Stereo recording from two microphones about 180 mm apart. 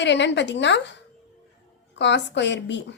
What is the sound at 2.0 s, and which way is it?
Speech, 75° left (ahead or behind).